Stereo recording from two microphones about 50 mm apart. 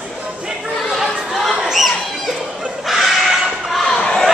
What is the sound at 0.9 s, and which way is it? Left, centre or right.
Chatter, centre.